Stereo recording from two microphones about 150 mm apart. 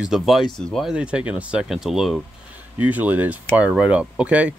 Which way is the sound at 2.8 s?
10° right (ahead or behind).